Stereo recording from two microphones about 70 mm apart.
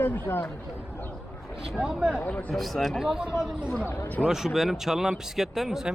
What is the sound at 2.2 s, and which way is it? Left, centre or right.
Speech, left.